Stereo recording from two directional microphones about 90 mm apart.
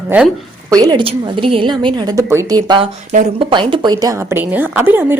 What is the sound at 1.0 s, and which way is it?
A woman's voice, 80° right.